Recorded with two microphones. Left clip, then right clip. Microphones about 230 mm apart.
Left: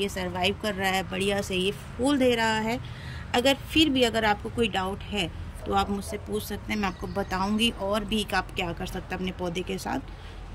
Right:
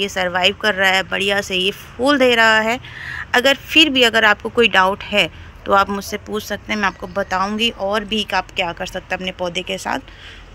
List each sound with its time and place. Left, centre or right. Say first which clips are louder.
0.0 s speech: right 11 dB; centre
4.6 s speech: right 14 dB; right
5.8 s speech: right 8 dB; centre